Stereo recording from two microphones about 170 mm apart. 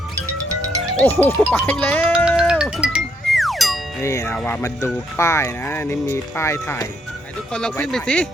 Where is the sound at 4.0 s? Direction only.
15° left (ahead or behind).